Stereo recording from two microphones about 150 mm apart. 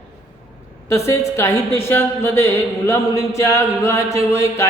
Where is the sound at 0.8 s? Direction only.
20° left (ahead or behind).